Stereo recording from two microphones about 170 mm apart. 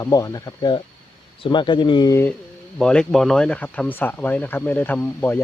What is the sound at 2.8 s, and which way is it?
Speech, 5° left (ahead or behind).